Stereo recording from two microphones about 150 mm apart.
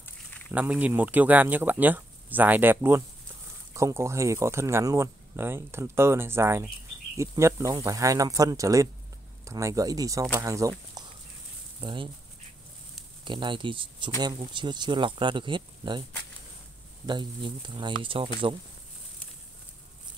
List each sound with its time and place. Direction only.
0.0 s a sound: 10° left (ahead or behind)
0.5 s speech: 10° right (ahead or behind)
11.0 s a sound: 25° right (ahead or behind)
11.8 s speech: 35° right (ahead or behind)
13.2 s speech: 30° right (ahead or behind)
17.0 s speech: 30° right (ahead or behind)